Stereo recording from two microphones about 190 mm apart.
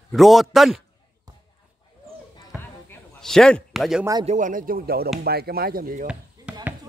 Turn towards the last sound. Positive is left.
turn(degrees=-5)  # may be behind; listen again after turning